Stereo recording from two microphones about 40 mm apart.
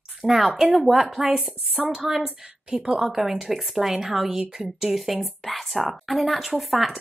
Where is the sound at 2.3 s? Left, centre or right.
Centre.